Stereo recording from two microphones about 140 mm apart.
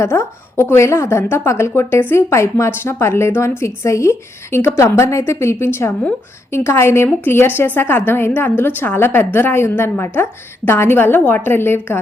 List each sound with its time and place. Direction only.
0.0 s a woman's voice: 20° left (ahead or behind)